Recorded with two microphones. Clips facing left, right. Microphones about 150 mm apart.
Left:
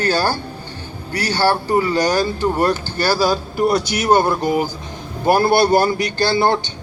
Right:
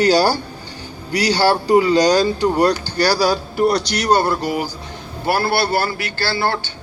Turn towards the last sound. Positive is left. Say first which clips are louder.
# left 4 dB
turn(degrees=20)  # may be behind; listen again after turning